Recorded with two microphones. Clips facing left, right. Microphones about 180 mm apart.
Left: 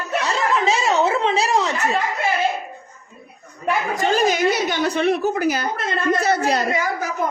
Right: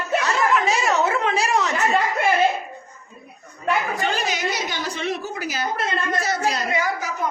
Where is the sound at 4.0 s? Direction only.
45° left (ahead or behind); by 5.7 s 60° left (ahead or behind).